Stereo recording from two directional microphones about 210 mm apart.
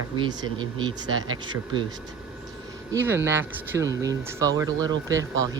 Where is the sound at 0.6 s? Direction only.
20° right (ahead or behind).